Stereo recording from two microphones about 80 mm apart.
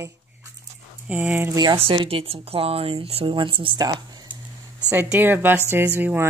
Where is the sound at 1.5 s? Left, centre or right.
Right.